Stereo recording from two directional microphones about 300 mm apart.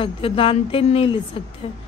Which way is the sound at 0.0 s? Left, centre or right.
Centre.